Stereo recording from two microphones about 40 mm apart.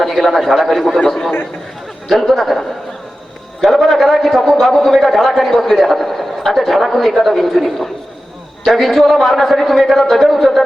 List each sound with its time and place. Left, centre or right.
0.0 s a man's voice: centre
3.6 s a man's voice: centre